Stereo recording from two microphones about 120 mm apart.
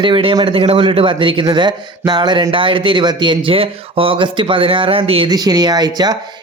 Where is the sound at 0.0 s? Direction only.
45° right (ahead or behind).